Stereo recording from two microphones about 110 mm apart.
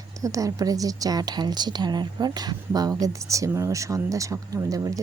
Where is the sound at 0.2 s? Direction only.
30° right (ahead or behind).